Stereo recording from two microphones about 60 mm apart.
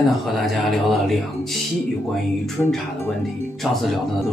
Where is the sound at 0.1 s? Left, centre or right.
Centre.